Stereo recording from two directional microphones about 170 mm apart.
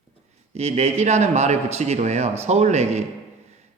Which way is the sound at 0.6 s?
40° right (ahead or behind).